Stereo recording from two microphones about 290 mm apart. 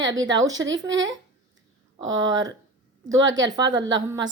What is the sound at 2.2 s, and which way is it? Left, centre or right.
Speech, centre.